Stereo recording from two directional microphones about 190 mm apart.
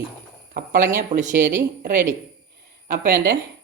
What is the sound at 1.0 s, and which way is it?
Speech, 40° right (ahead or behind).